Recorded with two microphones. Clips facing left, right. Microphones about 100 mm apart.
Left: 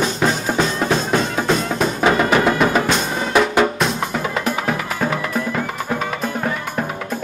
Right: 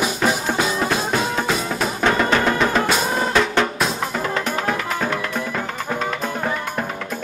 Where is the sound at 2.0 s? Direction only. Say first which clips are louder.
Left 2 dB; 5° left (ahead or behind).